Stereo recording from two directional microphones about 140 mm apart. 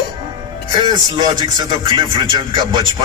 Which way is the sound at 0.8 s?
30° right (ahead or behind).